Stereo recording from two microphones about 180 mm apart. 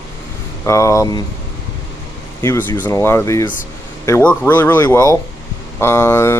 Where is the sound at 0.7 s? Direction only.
15° left (ahead or behind).